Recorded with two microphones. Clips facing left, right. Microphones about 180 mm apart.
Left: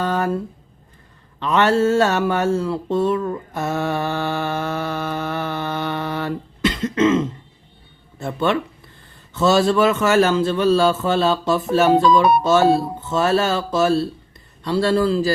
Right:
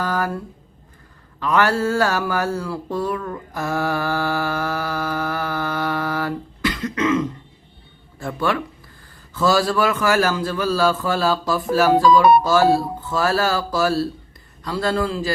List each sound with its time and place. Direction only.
0.0 s a man's voice: 25° left (ahead or behind)
1.4 s a sound: 25° left (ahead or behind)
8.2 s a man's voice: 25° left (ahead or behind)